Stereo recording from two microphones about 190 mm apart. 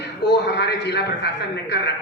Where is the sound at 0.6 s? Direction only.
60° left (ahead or behind).